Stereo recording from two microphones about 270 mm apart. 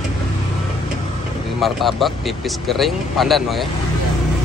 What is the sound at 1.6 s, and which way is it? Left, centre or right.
Speech, centre.